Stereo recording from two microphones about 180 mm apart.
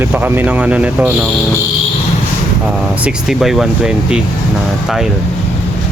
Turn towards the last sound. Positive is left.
turn(degrees=-5)  # may be behind; listen again after turning